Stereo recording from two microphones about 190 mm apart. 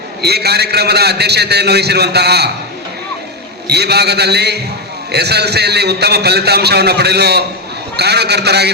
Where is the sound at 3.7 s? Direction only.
60° right (ahead or behind).